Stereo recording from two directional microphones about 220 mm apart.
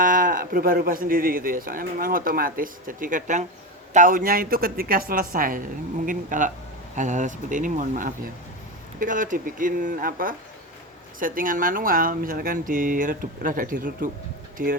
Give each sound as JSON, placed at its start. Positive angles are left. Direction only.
{"t": 0.0, "sound": "speech", "side_deg": -40}